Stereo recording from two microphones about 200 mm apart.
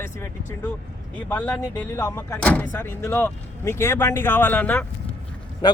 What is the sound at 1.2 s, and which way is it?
Speech, 10° left (ahead or behind).